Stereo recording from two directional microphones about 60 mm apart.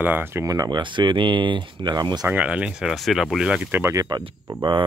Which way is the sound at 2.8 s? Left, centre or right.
Centre.